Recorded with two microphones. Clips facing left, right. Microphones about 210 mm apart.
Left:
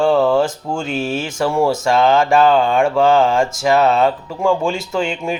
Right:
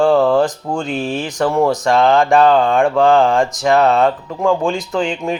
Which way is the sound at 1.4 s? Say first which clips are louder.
Right 2 dB; 10° left (ahead or behind).